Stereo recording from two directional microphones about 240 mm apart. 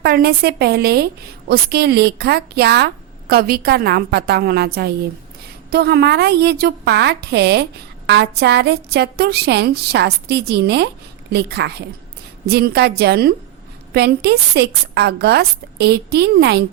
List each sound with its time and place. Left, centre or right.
0.0 s a woman's voice: right